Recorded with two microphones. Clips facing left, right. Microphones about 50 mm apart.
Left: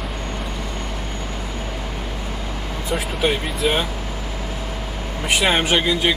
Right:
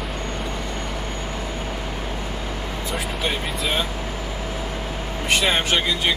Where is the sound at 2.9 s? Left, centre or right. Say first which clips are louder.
Left 6 dB; centre.